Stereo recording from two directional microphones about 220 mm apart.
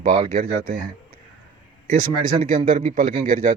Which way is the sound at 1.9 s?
40° right (ahead or behind).